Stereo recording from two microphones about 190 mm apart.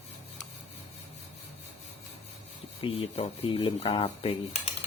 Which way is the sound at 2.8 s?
30° left (ahead or behind).